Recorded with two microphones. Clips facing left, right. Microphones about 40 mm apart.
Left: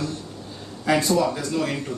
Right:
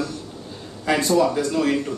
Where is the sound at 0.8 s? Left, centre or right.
Centre.